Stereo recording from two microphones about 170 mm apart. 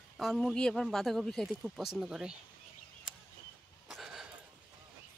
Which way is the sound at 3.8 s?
Centre (ahead or behind).